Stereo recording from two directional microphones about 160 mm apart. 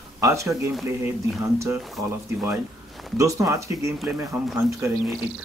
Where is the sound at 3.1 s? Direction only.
20° right (ahead or behind).